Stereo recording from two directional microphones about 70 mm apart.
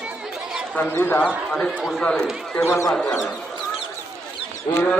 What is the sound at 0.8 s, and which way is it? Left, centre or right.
Speech, left.